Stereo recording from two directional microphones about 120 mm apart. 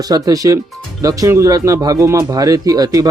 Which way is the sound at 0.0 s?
30° right (ahead or behind).